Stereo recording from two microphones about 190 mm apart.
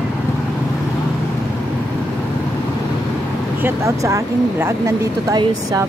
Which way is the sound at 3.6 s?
15° right (ahead or behind).